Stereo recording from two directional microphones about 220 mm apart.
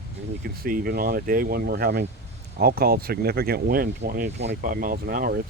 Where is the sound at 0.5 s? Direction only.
40° right (ahead or behind).